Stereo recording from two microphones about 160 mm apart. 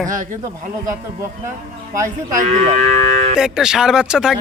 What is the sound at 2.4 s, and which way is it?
Speech, 45° right (ahead or behind).